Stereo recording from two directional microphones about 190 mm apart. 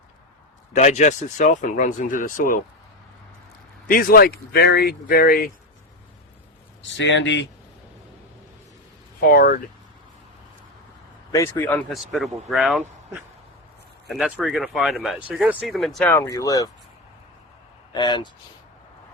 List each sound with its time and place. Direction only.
0.7 s speech: 40° left (ahead or behind)
3.8 s speech: 50° left (ahead or behind)
6.9 s speech: 70° left (ahead or behind)
9.2 s speech: 50° left (ahead or behind)
11.3 s speech: 15° left (ahead or behind)
16.1 s speech: 15° left (ahead or behind)
17.9 s speech: 25° left (ahead or behind)